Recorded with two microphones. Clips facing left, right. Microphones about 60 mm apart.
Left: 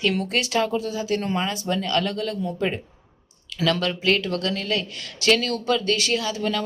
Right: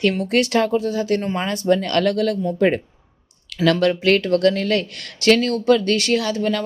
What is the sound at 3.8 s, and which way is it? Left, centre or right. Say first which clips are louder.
Speech: right 6 dB; right.